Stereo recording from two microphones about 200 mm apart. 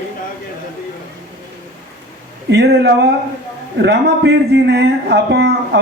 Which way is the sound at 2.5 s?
60° right (ahead or behind).